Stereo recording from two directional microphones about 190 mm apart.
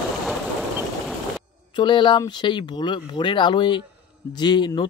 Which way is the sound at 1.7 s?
25° left (ahead or behind).